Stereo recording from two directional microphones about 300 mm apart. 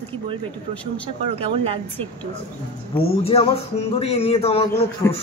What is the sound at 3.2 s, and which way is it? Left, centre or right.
A man's voice, centre.